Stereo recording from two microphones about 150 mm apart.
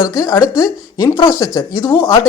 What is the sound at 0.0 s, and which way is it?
Speech, 25° left (ahead or behind).